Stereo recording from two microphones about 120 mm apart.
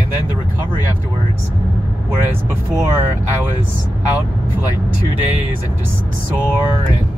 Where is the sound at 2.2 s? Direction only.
20° right (ahead or behind).